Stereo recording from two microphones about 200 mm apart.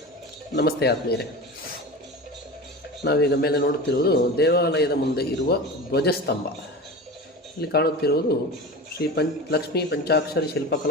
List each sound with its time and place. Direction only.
0.5 s a man's voice: 55° left (ahead or behind)
3.0 s a man's voice: 55° left (ahead or behind)
7.6 s a man's voice: 55° left (ahead or behind)